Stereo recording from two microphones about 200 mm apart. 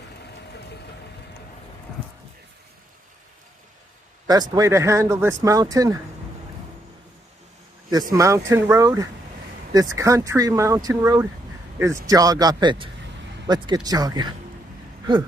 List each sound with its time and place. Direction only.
4.3 s speech: 15° right (ahead or behind)
7.9 s speech: 15° right (ahead or behind)